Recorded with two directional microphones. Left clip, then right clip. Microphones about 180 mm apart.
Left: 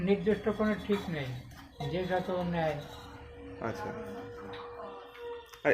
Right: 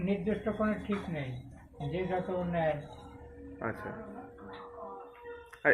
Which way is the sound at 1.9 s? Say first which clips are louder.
Left 2 dB; 15° left (ahead or behind).